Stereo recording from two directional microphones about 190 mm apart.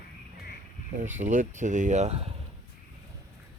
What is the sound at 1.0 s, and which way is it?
Speech, 40° right (ahead or behind).